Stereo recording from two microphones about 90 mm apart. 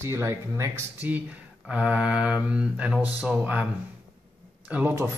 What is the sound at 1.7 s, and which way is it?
Speech, 10° right (ahead or behind).